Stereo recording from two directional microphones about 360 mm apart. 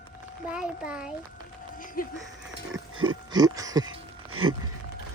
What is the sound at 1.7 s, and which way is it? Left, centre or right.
Speech, left.